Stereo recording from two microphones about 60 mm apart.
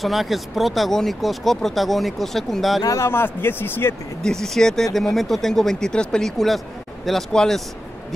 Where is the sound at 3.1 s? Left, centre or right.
Left.